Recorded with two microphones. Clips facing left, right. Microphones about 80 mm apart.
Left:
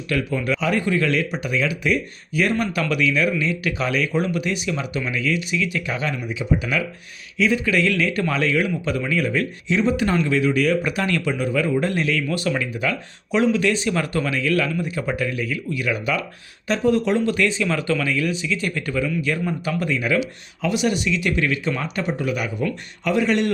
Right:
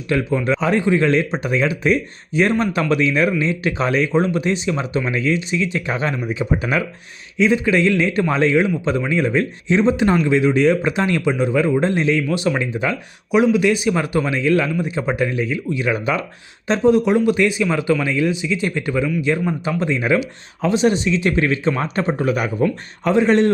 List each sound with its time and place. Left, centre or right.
0.1 s speech: right